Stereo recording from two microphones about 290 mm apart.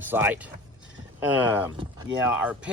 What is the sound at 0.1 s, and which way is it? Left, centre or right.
Speech, centre.